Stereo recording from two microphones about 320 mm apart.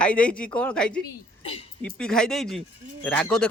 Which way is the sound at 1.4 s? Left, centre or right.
Centre.